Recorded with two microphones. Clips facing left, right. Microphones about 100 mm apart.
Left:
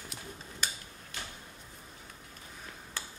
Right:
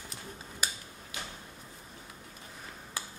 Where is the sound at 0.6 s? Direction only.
5° right (ahead or behind).